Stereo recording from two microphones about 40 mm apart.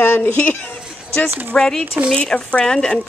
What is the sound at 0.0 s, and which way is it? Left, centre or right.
Speech, left.